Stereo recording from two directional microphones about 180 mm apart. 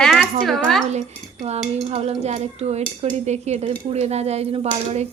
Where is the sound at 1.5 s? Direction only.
35° right (ahead or behind).